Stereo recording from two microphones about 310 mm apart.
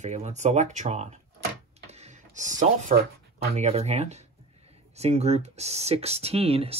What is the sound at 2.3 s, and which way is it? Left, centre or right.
Speech, right.